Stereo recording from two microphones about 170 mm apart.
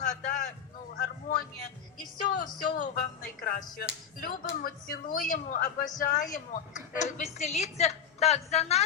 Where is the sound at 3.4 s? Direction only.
55° left (ahead or behind).